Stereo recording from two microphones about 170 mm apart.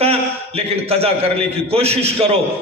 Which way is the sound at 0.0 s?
35° right (ahead or behind).